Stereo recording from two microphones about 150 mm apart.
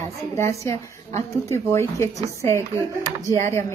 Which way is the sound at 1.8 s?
20° left (ahead or behind).